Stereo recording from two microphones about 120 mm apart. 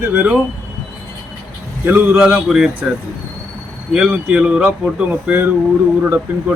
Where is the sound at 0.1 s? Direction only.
10° right (ahead or behind).